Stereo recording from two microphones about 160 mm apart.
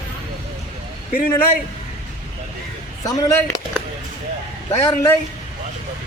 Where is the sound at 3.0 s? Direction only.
25° left (ahead or behind).